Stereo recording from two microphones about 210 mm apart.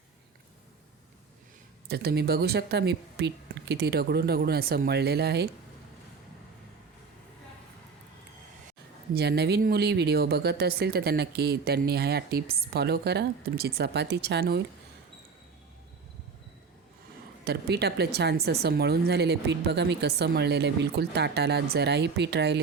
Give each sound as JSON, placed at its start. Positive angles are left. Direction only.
{"t": 1.9, "sound": "speech", "side_deg": -50}
{"t": 9.1, "sound": "speech", "side_deg": -50}
{"t": 17.4, "sound": "speech", "side_deg": -50}